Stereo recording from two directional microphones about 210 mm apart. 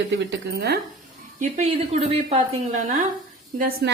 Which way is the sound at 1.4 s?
30° right (ahead or behind).